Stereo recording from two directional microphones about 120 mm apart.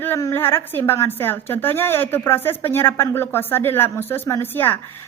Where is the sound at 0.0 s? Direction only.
20° left (ahead or behind).